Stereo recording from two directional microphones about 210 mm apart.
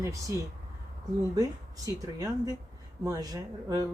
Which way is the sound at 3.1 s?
15° right (ahead or behind).